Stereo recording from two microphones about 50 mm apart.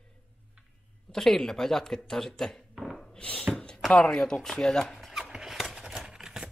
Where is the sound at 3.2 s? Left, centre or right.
Left.